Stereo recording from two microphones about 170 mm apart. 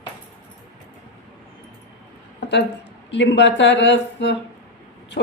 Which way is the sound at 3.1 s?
90° left.